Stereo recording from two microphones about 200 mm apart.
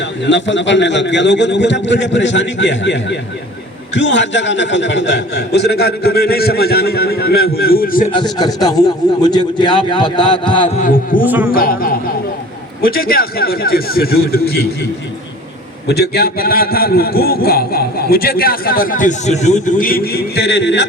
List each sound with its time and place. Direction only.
0.0 s a man's voice: 65° left (ahead or behind); by 8.1 s 45° left (ahead or behind)
8.1 s a man's voice: 20° left (ahead or behind)
10.8 s a man's voice: 45° left (ahead or behind)
15.9 s a man's voice: 50° left (ahead or behind)